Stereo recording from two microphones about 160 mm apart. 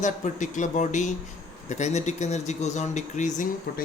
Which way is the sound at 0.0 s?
50° left (ahead or behind).